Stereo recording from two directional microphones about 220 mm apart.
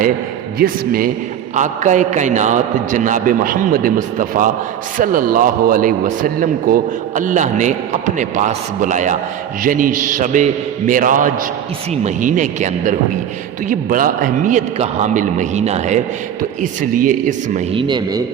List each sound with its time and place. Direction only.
0.6 s a man's voice: 40° right (ahead or behind); by 18.2 s 20° right (ahead or behind)